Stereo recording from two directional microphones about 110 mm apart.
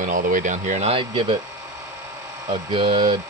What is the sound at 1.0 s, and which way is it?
Speech, 50° right (ahead or behind).